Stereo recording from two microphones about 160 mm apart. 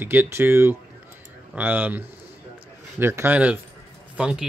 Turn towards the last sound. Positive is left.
turn(degrees=-5)  # may be behind; listen again after turning